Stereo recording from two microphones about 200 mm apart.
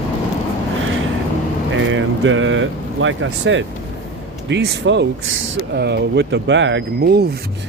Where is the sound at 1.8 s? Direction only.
70° right (ahead or behind).